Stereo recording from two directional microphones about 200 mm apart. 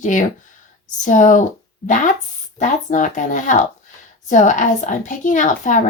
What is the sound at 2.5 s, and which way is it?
Speech, 40° left (ahead or behind).